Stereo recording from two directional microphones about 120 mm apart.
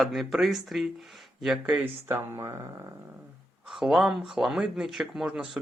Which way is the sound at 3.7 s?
Centre (ahead or behind).